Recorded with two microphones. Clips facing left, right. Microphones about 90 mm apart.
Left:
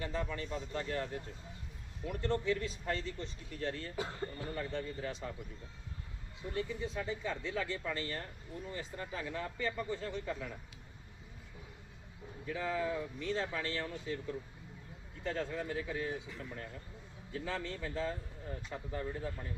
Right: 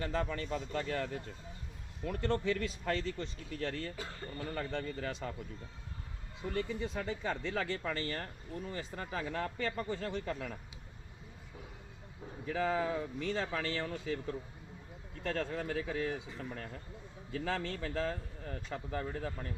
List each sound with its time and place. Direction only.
0.0 s speech: 65° right (ahead or behind); by 1.1 s 90° right
2.2 s speech: 70° right (ahead or behind)
3.9 s speech: 25° left (ahead or behind)
4.5 s speech: 70° right (ahead or behind)
6.5 s speech: 65° right (ahead or behind)
8.7 s speech: 85° right; by 10.5 s 65° right (ahead or behind)
12.5 s speech: 65° right (ahead or behind)
15.2 s speech: 65° right (ahead or behind)
17.4 s speech: 70° right (ahead or behind)